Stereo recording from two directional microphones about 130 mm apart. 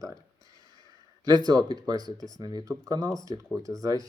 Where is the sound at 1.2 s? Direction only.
30° right (ahead or behind).